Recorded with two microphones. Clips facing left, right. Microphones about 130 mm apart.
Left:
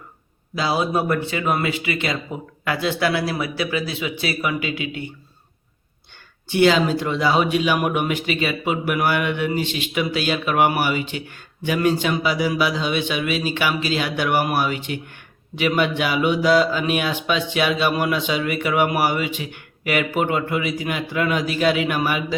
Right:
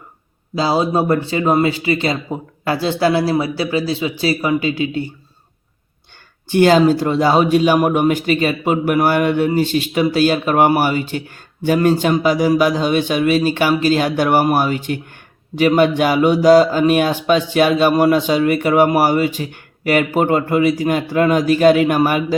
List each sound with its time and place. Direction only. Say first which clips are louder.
0.5 s speech: right 5 dB; 30° right (ahead or behind)
6.5 s speech: right 5 dB; 45° right (ahead or behind)